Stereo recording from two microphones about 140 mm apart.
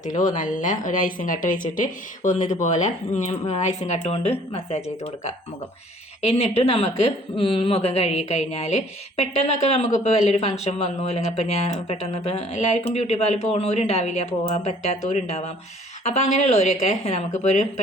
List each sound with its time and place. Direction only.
0.0 s a woman's voice: 65° left (ahead or behind)